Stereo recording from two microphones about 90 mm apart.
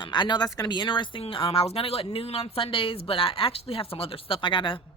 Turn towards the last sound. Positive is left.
turn(degrees=65)  # may be behind; listen again after turning